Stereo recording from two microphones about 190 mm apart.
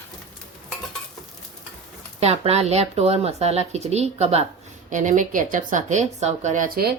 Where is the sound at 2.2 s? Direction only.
35° right (ahead or behind).